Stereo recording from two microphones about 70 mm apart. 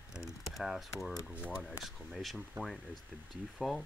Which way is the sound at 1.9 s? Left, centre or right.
Centre.